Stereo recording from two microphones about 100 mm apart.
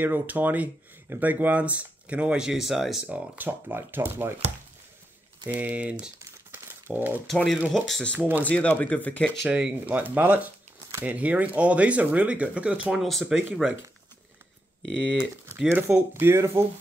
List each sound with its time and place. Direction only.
0.0 s speech: 15° right (ahead or behind); by 3.0 s centre (ahead or behind)
3.1 s speech: 15° right (ahead or behind)
5.5 s speech: 15° right (ahead or behind)
6.5 s a sound: 20° right (ahead or behind)
7.2 s speech: centre (ahead or behind)
8.1 s speech: 15° right (ahead or behind)
8.5 s speech: 15° left (ahead or behind)
9.5 s speech: 10° right (ahead or behind)
13.0 s speech: centre (ahead or behind)
15.7 s speech: 20° right (ahead or behind)